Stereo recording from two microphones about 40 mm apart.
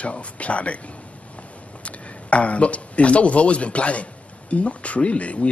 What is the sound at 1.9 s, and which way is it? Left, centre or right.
Speech, left.